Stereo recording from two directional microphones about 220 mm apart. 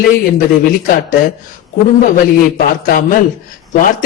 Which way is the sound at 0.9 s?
40° left (ahead or behind).